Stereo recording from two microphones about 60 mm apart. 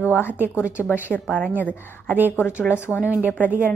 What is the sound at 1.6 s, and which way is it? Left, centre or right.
A woman's voice, left.